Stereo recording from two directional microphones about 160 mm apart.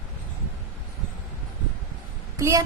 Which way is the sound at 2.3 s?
20° right (ahead or behind).